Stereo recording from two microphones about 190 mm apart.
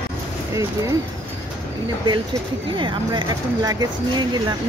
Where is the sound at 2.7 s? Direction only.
25° right (ahead or behind).